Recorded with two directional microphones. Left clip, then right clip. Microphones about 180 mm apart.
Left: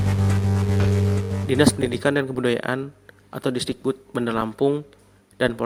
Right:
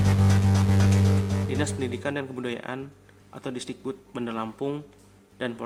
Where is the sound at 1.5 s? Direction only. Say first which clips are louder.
Left 13 dB; 40° left (ahead or behind).